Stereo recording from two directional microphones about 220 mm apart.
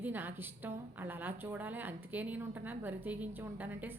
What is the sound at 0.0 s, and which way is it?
A woman's voice, 10° right (ahead or behind).